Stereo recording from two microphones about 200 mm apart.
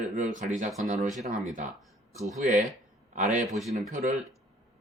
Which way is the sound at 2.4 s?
40° right (ahead or behind).